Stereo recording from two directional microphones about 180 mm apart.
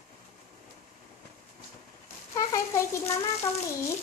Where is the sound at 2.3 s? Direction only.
20° left (ahead or behind).